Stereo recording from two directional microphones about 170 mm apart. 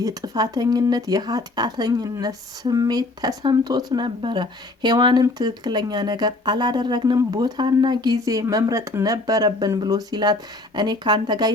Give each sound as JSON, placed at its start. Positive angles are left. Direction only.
{"t": 0.0, "sound": "speech", "side_deg": -20}